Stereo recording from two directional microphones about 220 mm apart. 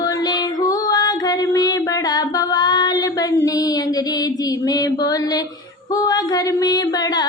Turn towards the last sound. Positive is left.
turn(degrees=15)  # may be behind; listen again after turning